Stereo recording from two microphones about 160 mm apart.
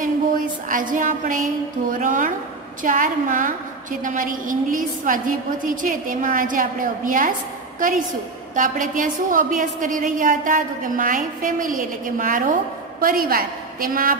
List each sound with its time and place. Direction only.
0.0 s a sound: 55° right (ahead or behind)
2.8 s a woman's voice: 55° right (ahead or behind)
8.5 s a woman's voice: 55° right (ahead or behind)